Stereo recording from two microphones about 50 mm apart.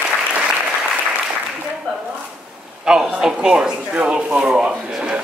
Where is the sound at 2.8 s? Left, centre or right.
Centre.